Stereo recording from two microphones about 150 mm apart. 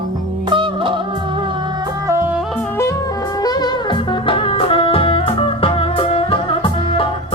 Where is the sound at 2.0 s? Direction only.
10° right (ahead or behind).